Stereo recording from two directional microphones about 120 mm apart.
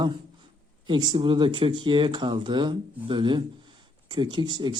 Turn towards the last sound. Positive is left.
turn(degrees=-40)  # may be behind; listen again after turning